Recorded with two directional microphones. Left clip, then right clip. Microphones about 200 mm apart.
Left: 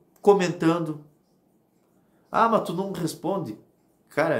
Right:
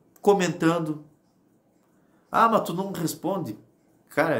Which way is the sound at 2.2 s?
5° right (ahead or behind).